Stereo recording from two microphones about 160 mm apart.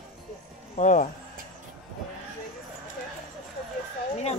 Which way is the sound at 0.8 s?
50° left (ahead or behind).